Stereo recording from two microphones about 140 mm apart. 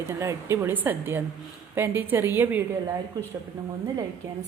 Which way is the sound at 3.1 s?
25° right (ahead or behind).